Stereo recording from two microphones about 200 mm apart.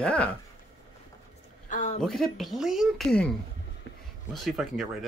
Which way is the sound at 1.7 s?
40° left (ahead or behind).